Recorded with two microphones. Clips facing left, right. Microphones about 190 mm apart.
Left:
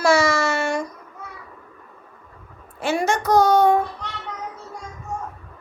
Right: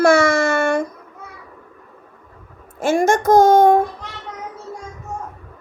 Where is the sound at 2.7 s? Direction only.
45° right (ahead or behind).